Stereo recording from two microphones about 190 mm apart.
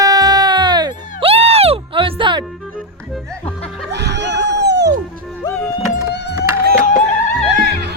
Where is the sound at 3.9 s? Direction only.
65° right (ahead or behind).